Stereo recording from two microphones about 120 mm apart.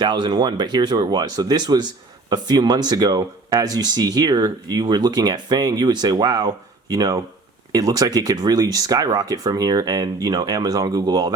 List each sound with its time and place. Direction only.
0.0 s speech: 40° right (ahead or behind)